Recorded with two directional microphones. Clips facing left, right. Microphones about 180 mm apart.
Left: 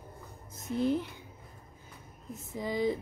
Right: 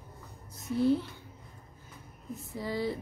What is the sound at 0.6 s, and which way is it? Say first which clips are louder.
Speech: right 2 dB; 20° left (ahead or behind).